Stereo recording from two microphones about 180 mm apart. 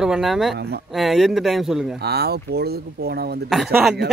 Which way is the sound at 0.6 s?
65° right (ahead or behind).